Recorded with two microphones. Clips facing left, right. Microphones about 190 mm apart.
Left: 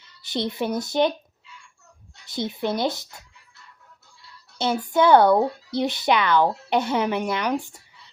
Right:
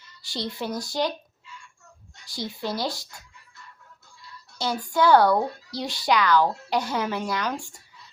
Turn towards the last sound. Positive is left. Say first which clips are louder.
# left 4 dB
turn(degrees=15)  # may be behind; listen again after turning